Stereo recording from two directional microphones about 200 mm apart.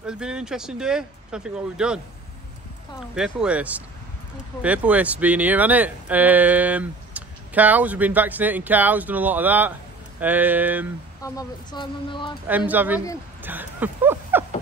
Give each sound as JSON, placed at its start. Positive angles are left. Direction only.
{"t": 0.0, "sound": "speech", "side_deg": -5}
{"t": 3.0, "sound": "speech", "side_deg": -5}
{"t": 11.2, "sound": "speech", "side_deg": 20}
{"t": 12.4, "sound": "speech", "side_deg": -10}